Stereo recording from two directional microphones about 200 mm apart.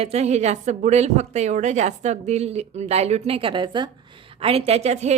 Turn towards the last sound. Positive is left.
turn(degrees=-35)  # may be behind; listen again after turning